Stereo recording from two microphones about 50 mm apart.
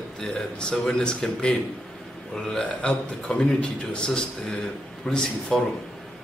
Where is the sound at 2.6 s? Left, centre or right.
Left.